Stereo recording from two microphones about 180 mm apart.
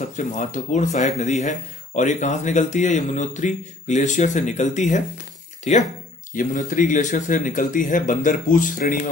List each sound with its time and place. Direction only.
0.1 s speech: 45° left (ahead or behind)